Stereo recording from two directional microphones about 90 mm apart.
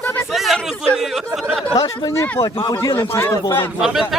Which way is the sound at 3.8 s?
5° right (ahead or behind).